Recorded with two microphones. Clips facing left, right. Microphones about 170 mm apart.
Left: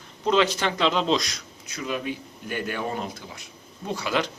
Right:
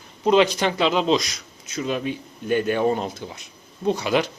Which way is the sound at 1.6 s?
25° right (ahead or behind).